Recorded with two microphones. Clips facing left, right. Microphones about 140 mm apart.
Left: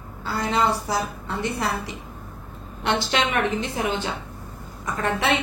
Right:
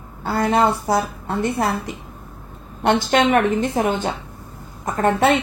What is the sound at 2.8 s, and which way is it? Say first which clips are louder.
A woman's voice: right 6 dB; 45° right (ahead or behind).